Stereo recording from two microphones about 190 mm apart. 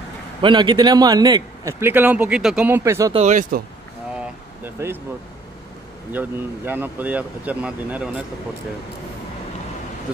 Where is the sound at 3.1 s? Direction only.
40° right (ahead or behind).